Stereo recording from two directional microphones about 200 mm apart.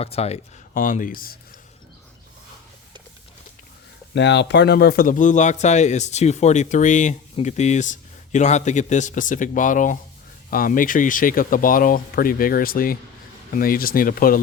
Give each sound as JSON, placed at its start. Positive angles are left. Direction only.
{"t": 0.0, "sound": "speech", "side_deg": 30}
{"t": 0.7, "sound": "speech", "side_deg": 40}
{"t": 4.1, "sound": "speech", "side_deg": 60}